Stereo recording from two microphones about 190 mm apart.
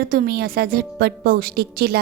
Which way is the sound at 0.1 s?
55° right (ahead or behind).